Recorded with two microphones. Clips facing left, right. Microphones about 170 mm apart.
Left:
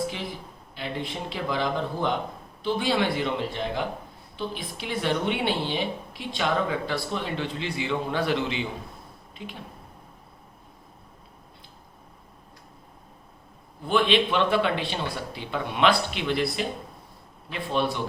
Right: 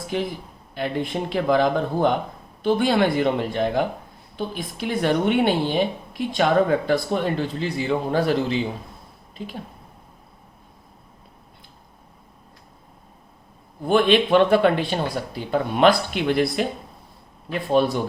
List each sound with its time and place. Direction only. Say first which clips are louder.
0.7 s a woman's voice: right 7 dB; 50° right (ahead or behind)
13.8 s a woman's voice: right 5 dB; 45° right (ahead or behind)